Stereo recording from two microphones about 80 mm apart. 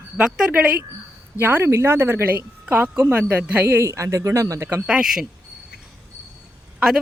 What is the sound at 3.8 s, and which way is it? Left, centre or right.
Speech, right.